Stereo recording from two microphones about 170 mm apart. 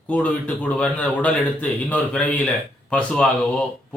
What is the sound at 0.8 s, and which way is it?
A man's voice, 10° left (ahead or behind).